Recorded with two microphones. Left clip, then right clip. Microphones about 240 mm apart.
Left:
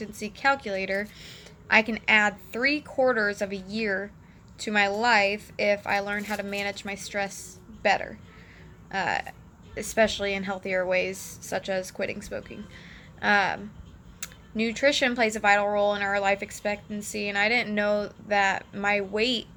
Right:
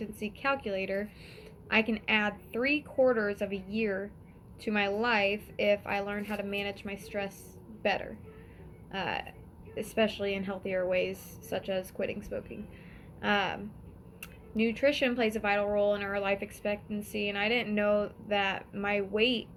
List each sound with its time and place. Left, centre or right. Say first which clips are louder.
0.2 s a woman's voice: left 7 dB; centre